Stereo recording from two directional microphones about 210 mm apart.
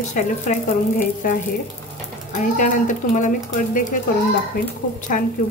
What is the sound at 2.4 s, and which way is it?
Speech, 40° left (ahead or behind).